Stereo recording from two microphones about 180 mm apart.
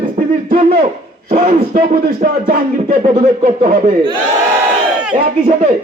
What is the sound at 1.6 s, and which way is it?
A man's voice, 55° right (ahead or behind).